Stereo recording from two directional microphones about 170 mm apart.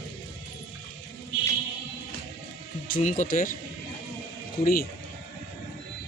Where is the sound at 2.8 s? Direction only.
55° left (ahead or behind).